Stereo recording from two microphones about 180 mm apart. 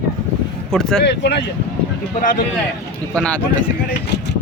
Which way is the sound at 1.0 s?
70° left (ahead or behind).